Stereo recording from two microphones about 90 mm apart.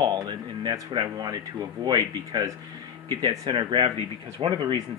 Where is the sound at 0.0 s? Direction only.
55° right (ahead or behind).